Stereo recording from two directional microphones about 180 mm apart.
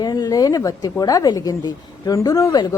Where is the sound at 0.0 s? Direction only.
20° left (ahead or behind).